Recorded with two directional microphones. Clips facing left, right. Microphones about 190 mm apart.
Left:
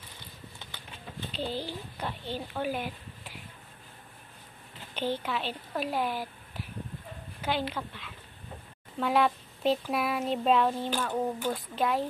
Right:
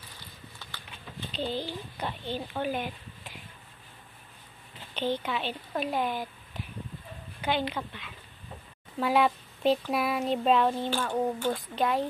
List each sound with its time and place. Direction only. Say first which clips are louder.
0.6 s a sound: right 2 dB; 20° left (ahead or behind)
1.3 s a child's voice: right 2 dB; 5° left (ahead or behind)
4.9 s speech: right 1 dB; 10° left (ahead or behind)